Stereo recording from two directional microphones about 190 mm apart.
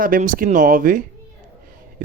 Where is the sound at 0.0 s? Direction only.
45° right (ahead or behind).